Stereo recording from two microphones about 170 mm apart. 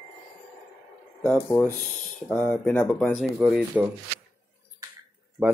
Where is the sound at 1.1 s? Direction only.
10° left (ahead or behind).